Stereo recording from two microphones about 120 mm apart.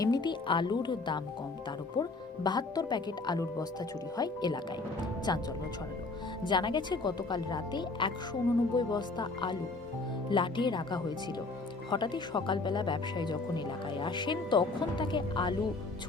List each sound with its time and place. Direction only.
0.0 s speech: 35° left (ahead or behind)